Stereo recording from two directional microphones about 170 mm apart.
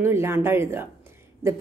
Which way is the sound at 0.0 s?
15° right (ahead or behind).